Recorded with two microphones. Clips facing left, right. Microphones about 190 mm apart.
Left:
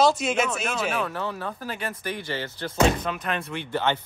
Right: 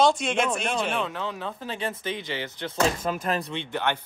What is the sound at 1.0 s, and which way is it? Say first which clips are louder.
Speech: left 1 dB; 20° right (ahead or behind).